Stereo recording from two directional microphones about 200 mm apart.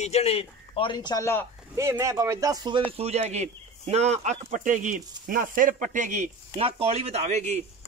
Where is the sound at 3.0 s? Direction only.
35° right (ahead or behind).